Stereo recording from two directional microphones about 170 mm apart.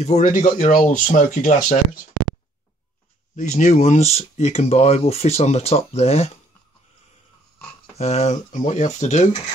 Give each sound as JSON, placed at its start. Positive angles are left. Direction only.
{"t": 0.0, "sound": "speech", "side_deg": 45}
{"t": 3.3, "sound": "speech", "side_deg": 45}
{"t": 8.0, "sound": "speech", "side_deg": 40}